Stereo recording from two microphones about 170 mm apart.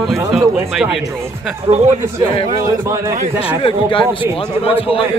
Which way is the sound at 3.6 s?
30° left (ahead or behind).